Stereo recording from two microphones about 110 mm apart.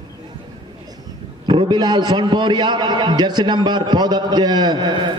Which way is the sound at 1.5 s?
45° right (ahead or behind).